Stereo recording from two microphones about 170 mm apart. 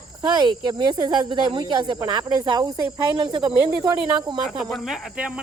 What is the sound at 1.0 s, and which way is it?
Speech, 25° right (ahead or behind).